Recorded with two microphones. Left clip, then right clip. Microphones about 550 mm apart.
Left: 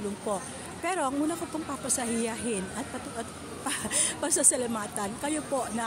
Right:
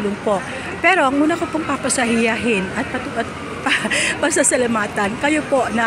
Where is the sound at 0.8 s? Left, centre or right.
Left.